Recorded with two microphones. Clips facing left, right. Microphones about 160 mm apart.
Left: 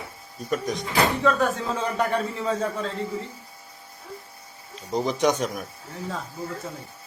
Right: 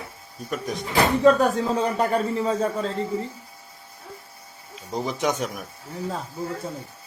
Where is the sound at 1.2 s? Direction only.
35° right (ahead or behind).